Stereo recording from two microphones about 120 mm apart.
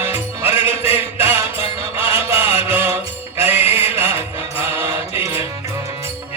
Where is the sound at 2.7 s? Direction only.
20° right (ahead or behind).